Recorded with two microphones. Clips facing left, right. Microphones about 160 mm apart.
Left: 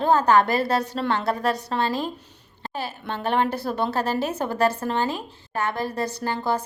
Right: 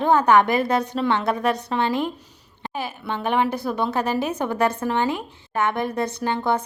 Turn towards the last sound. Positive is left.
turn(degrees=-20)  # may be behind; listen again after turning